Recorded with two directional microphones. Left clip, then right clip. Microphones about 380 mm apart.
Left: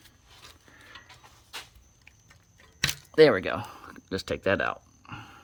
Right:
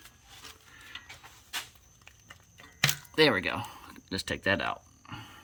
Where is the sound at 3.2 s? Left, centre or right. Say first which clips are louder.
Left 6 dB; centre.